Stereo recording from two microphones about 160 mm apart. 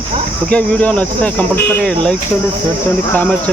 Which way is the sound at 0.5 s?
5° left (ahead or behind).